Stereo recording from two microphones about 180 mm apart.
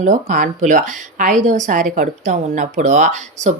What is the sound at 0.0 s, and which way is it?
Speech, 45° right (ahead or behind).